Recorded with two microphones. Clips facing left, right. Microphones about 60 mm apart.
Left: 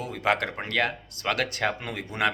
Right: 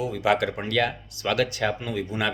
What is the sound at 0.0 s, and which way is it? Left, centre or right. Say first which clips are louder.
Speech: right 3 dB; left.